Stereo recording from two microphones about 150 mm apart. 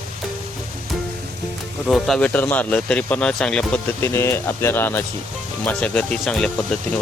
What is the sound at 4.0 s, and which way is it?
Speech, 15° left (ahead or behind).